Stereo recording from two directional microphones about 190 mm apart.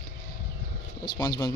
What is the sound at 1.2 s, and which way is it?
Speech, 25° left (ahead or behind).